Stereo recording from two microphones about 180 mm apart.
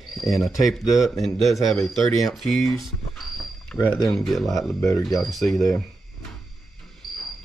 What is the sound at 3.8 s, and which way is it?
Speech, 10° left (ahead or behind).